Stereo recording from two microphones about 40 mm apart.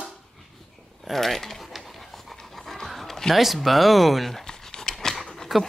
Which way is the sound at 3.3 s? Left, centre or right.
Centre.